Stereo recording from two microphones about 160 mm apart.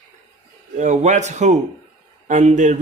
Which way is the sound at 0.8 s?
50° right (ahead or behind).